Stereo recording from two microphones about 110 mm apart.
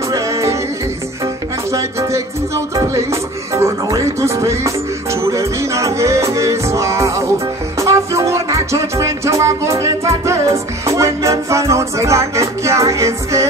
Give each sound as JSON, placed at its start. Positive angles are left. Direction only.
{"t": 0.1, "sound": "music", "side_deg": -25}
{"t": 1.7, "sound": "music", "side_deg": -25}